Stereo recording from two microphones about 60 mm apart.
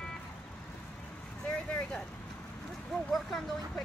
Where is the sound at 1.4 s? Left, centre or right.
Centre.